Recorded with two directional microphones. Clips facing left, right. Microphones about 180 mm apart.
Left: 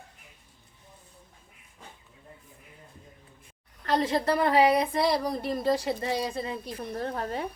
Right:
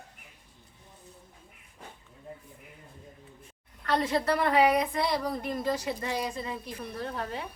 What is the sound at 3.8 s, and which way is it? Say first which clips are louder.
A woman's voice: left 2 dB; 30° left (ahead or behind).